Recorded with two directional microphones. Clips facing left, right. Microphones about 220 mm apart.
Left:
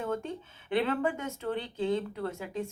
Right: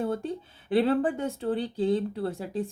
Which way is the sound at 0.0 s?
35° right (ahead or behind).